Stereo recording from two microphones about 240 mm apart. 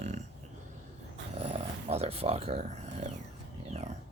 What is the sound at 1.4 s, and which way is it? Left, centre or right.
Speech, right.